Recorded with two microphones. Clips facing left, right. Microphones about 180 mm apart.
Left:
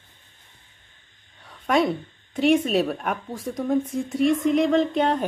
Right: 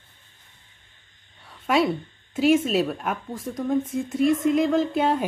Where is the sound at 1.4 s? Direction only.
5° right (ahead or behind).